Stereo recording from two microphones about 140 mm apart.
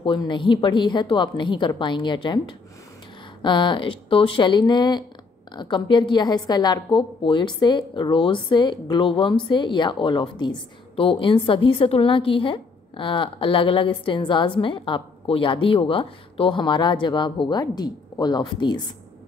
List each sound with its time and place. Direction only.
0.0 s a woman's voice: 35° left (ahead or behind)